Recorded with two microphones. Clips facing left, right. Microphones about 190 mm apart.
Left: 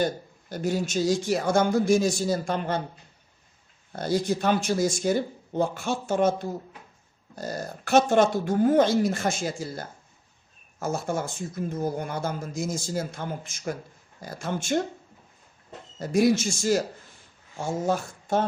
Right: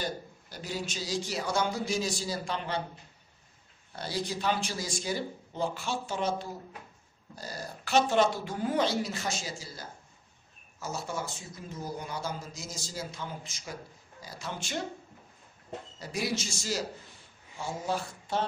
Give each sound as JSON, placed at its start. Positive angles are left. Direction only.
{"t": 0.0, "sound": "speech", "side_deg": 50}
{"t": 3.9, "sound": "speech", "side_deg": 45}
{"t": 16.0, "sound": "speech", "side_deg": 50}